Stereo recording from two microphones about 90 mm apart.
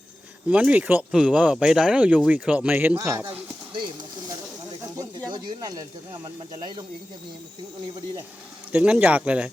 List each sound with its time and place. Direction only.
0.4 s a man's voice: 15° right (ahead or behind)
5.3 s speech: 45° right (ahead or behind)
8.7 s speech: 15° right (ahead or behind)